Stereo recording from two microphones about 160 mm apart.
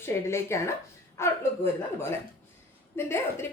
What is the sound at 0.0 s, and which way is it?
A woman's voice, 15° left (ahead or behind).